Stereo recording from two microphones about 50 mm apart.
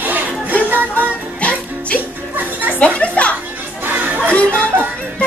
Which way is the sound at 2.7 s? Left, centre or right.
Left.